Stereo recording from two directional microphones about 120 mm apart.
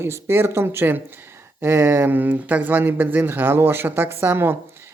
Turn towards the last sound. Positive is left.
turn(degrees=-20)  # may be behind; listen again after turning